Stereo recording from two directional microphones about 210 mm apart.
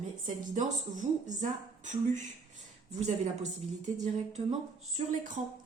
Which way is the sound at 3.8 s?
35° right (ahead or behind).